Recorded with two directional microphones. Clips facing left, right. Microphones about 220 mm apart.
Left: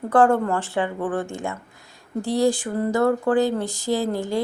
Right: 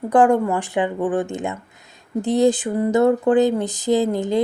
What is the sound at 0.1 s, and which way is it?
Speech, 15° right (ahead or behind).